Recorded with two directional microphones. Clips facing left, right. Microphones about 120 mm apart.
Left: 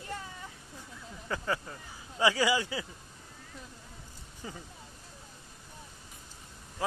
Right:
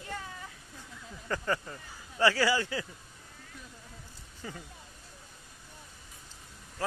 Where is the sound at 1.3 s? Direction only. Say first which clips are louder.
Right 1 dB; 5° left (ahead or behind).